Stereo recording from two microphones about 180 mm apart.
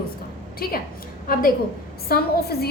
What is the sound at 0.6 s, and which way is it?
A woman's voice, 55° left (ahead or behind).